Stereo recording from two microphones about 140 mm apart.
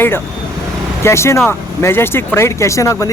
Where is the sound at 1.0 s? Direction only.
20° left (ahead or behind).